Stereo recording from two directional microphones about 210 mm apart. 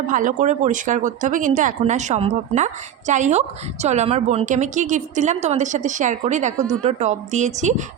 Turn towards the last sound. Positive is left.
turn(degrees=-35)  # may be behind; listen again after turning